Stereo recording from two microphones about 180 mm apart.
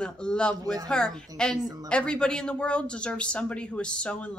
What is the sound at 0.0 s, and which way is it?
A man's voice, 5° left (ahead or behind).